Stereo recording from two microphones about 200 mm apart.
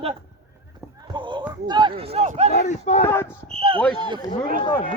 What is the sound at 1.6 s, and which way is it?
Speech, 20° right (ahead or behind).